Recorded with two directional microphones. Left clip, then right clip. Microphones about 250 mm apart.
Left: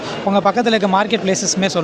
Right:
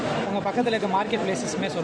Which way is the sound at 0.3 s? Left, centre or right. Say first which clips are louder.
Left 13 dB; left.